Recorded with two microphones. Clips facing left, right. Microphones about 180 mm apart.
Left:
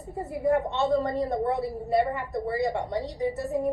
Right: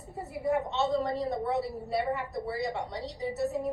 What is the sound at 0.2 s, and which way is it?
A woman's voice, 50° left (ahead or behind).